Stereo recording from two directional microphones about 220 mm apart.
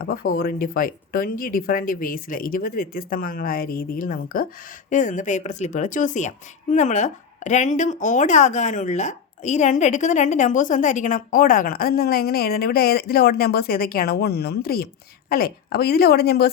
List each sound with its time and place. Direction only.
0.0 s a woman's voice: 40° left (ahead or behind)